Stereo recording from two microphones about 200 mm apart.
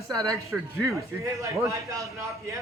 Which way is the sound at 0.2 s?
15° right (ahead or behind).